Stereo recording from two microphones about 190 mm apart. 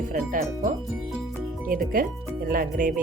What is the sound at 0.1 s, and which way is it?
Speech, 45° right (ahead or behind).